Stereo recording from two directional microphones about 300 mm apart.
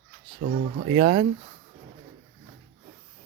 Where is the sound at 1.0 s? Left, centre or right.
Centre.